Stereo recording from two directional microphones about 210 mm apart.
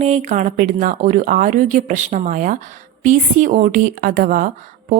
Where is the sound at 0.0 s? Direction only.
35° right (ahead or behind).